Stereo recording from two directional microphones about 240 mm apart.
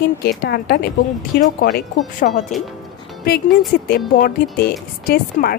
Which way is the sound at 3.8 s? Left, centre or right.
Left.